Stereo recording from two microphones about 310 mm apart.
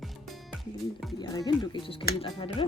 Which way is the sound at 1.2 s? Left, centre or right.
Centre.